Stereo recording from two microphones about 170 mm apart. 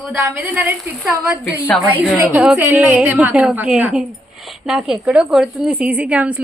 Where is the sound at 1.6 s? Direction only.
5° left (ahead or behind).